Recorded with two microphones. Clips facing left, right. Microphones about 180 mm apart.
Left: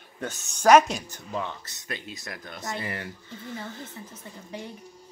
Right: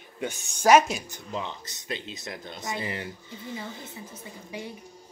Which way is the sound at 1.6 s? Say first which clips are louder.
Right 2 dB; 20° right (ahead or behind).